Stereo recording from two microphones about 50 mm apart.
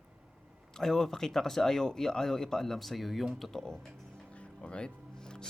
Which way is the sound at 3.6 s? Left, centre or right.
Centre.